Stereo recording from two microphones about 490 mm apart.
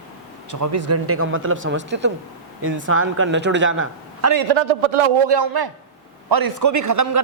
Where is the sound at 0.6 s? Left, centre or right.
Right.